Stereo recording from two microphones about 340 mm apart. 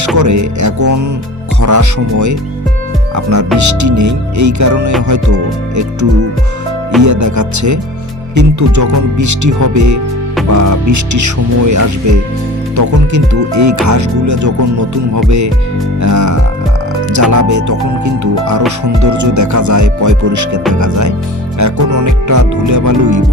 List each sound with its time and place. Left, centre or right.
0.2 s speech: right